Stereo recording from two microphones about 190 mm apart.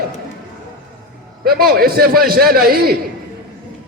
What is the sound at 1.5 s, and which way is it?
A man's voice, 55° right (ahead or behind).